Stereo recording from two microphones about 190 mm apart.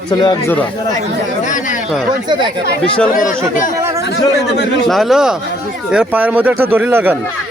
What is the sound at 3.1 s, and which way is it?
Speech, 45° left (ahead or behind).